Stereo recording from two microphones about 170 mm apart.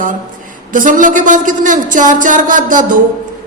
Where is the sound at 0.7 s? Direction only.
50° right (ahead or behind).